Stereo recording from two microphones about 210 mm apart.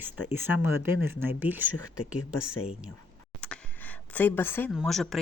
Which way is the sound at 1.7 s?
90° left.